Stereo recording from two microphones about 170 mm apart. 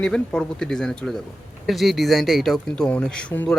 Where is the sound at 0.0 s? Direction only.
5° left (ahead or behind).